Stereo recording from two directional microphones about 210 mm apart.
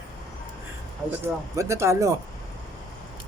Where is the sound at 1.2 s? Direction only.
15° right (ahead or behind).